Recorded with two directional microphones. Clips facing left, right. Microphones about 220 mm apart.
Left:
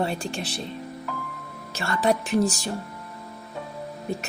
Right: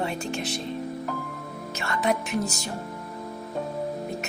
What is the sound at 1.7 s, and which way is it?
Speech, 35° left (ahead or behind).